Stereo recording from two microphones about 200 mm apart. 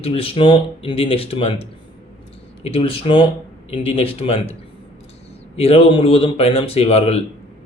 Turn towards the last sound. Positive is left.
turn(degrees=30)  # may be behind; listen again after turning